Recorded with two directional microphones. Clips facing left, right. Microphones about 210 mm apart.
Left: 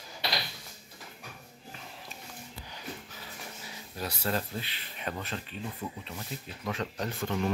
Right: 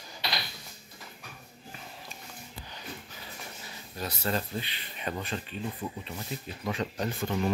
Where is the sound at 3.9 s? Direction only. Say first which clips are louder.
Right 1 dB; 10° left (ahead or behind).